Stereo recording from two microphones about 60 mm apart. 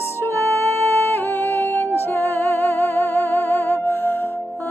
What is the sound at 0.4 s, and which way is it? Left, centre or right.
Music, left.